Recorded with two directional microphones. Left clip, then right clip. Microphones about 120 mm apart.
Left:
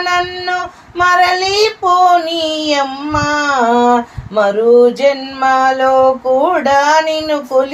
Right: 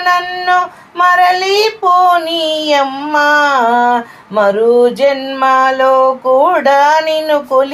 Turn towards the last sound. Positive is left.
turn(degrees=-35)  # may be behind; listen again after turning